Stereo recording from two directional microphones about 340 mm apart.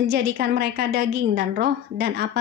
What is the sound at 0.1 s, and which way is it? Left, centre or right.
A woman's voice, right.